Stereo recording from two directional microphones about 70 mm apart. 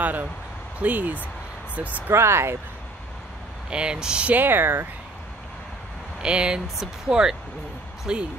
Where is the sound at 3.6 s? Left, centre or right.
Centre.